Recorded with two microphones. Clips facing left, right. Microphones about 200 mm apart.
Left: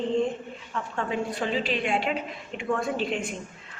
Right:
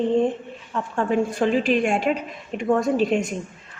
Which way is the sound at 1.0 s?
45° right (ahead or behind).